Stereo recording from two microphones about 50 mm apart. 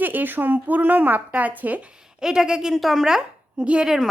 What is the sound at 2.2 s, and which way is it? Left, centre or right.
Speech, centre.